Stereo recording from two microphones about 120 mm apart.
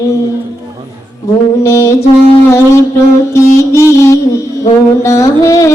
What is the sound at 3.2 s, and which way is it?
Music, 25° left (ahead or behind).